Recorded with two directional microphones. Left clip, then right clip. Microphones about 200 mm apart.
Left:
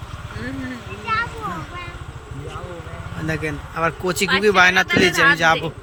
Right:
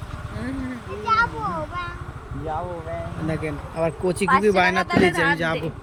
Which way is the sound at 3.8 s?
15° right (ahead or behind).